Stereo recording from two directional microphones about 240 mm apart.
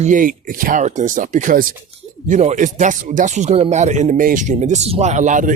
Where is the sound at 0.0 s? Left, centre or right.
Right.